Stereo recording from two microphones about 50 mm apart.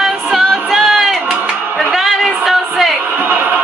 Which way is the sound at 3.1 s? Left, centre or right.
Right.